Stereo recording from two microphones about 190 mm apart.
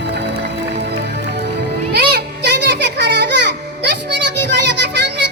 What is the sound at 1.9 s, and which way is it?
Music, 55° right (ahead or behind).